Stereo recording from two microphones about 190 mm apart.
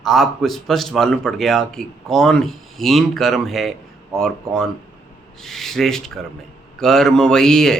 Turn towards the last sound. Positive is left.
turn(degrees=5)  # may be behind; listen again after turning